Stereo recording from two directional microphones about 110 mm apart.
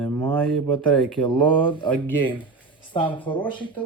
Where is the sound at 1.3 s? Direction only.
45° left (ahead or behind).